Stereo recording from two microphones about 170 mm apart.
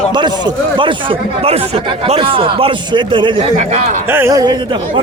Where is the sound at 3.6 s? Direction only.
45° right (ahead or behind).